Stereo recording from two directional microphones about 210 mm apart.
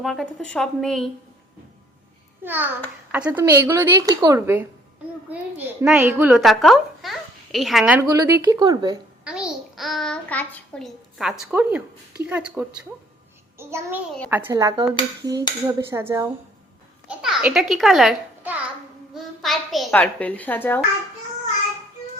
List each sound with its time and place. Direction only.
0.0 s a woman's voice: centre (ahead or behind)
2.4 s a child's voice: 10° right (ahead or behind)
8.0 s speech: 20° right (ahead or behind)
9.2 s a sound: 5° right (ahead or behind)
12.3 s a woman's voice: 5° right (ahead or behind)